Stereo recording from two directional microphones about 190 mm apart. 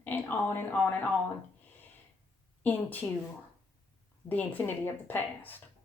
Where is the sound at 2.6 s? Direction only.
10° left (ahead or behind).